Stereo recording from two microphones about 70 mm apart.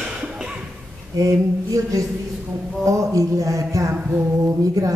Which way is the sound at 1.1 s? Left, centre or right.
Right.